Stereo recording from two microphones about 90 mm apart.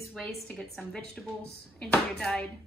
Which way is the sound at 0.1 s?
5° left (ahead or behind).